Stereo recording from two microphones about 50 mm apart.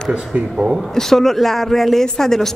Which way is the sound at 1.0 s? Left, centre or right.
Centre.